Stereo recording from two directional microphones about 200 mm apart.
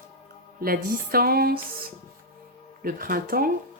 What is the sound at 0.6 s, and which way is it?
Speech, 45° right (ahead or behind).